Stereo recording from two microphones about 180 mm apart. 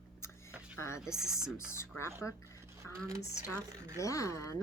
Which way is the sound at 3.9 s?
20° left (ahead or behind).